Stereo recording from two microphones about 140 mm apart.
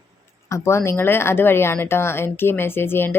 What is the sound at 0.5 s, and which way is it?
Speech, 20° left (ahead or behind).